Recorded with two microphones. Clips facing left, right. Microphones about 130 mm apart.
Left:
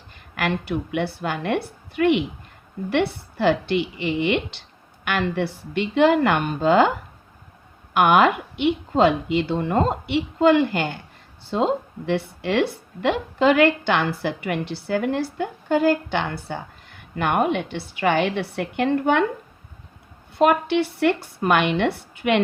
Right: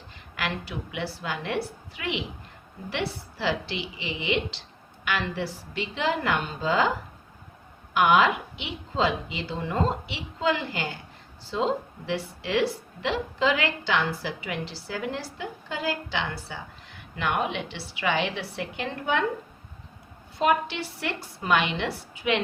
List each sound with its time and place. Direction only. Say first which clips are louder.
0.3 s a woman's voice: left 8 dB; 55° left (ahead or behind)
7.9 s a woman's voice: left 4 dB; 55° left (ahead or behind)
20.4 s a woman's voice: left 6 dB; 60° left (ahead or behind)